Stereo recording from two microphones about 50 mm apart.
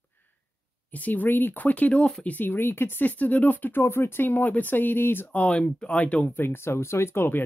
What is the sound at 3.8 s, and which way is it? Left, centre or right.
Speech, left.